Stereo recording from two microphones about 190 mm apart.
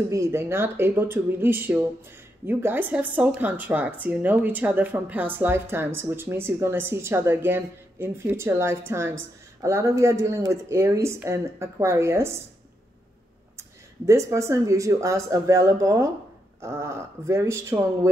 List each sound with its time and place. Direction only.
0.1 s speech: 15° right (ahead or behind)
13.6 s speech: 15° right (ahead or behind)